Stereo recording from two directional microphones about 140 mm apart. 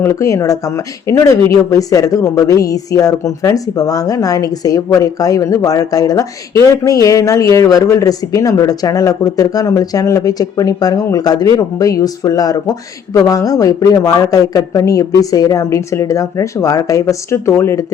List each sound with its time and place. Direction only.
0.0 s a woman's voice: 20° left (ahead or behind)